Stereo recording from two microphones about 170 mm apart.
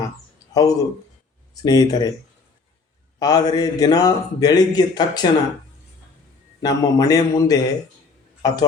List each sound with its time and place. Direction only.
0.5 s a man's voice: 20° left (ahead or behind)
3.2 s a man's voice: 25° left (ahead or behind)
6.6 s a man's voice: 20° left (ahead or behind)